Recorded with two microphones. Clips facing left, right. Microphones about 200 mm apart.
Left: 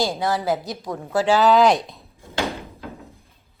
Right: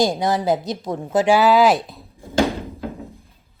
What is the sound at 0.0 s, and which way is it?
A woman's voice, 15° right (ahead or behind).